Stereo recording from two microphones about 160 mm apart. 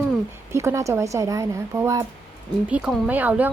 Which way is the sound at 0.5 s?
15° right (ahead or behind).